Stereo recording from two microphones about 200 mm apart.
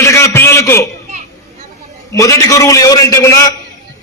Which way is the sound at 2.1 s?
15° left (ahead or behind).